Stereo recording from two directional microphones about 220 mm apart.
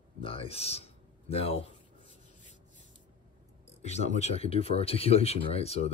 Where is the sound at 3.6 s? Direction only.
30° left (ahead or behind).